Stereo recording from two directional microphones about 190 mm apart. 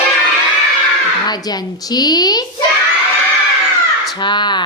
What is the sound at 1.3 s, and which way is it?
A woman's voice, 20° left (ahead or behind).